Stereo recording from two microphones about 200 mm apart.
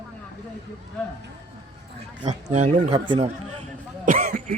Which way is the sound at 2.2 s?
35° right (ahead or behind).